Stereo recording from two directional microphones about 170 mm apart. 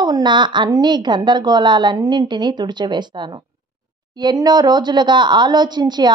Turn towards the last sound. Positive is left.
turn(degrees=-25)  # may be behind; listen again after turning